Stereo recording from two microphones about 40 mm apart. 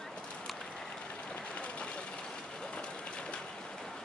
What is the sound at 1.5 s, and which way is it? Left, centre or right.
Vehicle, left.